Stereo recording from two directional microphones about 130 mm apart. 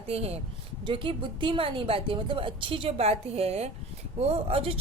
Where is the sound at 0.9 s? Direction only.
40° right (ahead or behind).